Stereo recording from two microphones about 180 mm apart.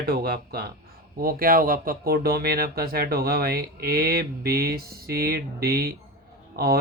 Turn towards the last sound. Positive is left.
turn(degrees=-60)  # may be behind; listen again after turning